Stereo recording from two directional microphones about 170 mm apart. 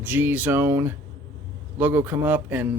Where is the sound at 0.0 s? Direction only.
10° right (ahead or behind).